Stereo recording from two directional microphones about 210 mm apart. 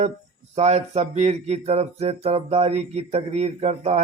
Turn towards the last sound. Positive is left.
turn(degrees=-30)  # may be behind; listen again after turning